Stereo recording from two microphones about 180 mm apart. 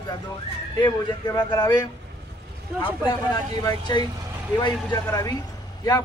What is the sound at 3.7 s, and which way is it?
Speech, 25° left (ahead or behind).